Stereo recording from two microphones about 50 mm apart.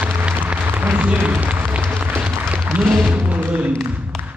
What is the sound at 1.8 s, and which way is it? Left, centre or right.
Applause, right.